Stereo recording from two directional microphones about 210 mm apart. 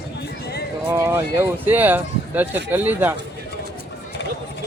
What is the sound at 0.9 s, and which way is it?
Speech, 10° right (ahead or behind).